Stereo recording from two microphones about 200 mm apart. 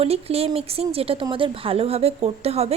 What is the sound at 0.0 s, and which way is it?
Speech, 30° right (ahead or behind).